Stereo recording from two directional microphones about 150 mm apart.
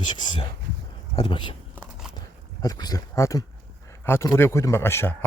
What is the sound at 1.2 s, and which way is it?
Speech, 30° left (ahead or behind).